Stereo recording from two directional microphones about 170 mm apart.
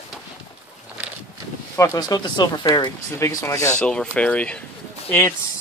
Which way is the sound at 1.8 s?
20° left (ahead or behind).